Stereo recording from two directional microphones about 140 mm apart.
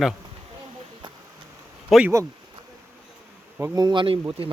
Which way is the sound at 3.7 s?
30° right (ahead or behind).